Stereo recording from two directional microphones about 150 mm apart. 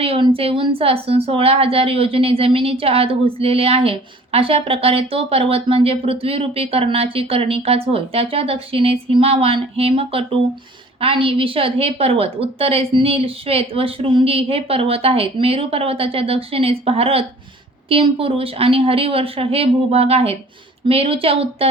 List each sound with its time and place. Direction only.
0.0 s a woman's voice: 40° right (ahead or behind)